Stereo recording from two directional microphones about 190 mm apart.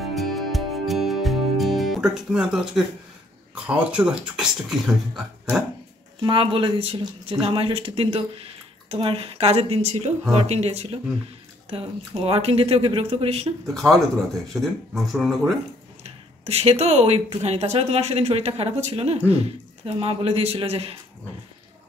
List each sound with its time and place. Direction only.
0.1 s music: centre (ahead or behind)
3.5 s speech: 5° right (ahead or behind)
6.2 s speech: 25° right (ahead or behind)
13.7 s speech: centre (ahead or behind)
16.0 s speech: 35° right (ahead or behind)